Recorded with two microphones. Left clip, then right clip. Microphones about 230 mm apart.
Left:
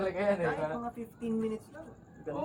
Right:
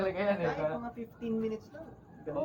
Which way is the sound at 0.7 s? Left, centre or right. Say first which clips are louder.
Left 1 dB; left.